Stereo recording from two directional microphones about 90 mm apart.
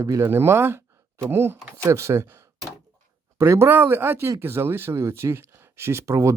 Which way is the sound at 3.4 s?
25° right (ahead or behind).